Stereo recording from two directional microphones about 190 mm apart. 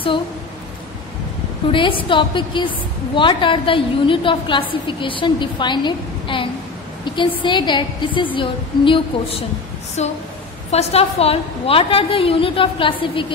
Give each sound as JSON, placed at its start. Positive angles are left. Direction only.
{"t": 1.7, "sound": "a woman's voice", "side_deg": 25}
{"t": 7.1, "sound": "a sound", "side_deg": 25}
{"t": 7.4, "sound": "a woman's voice", "side_deg": 25}